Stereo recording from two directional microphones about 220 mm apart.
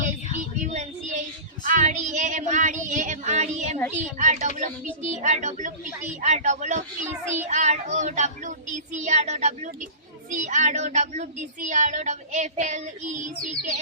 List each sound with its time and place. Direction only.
0.3 s child singing: 30° right (ahead or behind)